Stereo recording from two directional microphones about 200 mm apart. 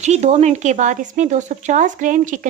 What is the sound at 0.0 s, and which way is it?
A woman's voice, 35° right (ahead or behind).